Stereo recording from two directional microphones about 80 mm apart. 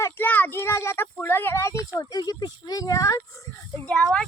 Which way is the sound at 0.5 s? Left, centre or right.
Left.